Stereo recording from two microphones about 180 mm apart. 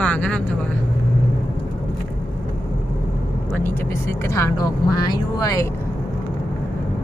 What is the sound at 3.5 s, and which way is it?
Speech, 10° left (ahead or behind).